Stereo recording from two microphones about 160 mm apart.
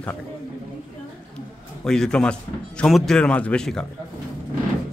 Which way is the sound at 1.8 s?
5° left (ahead or behind).